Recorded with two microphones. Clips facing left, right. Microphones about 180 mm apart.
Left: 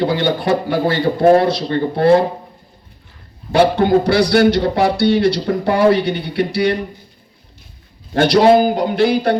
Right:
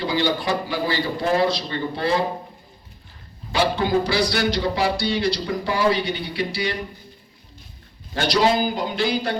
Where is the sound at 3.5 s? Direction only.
55° left (ahead or behind).